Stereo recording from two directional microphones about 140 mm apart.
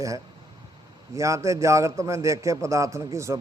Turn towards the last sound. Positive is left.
turn(degrees=-20)  # may be behind; listen again after turning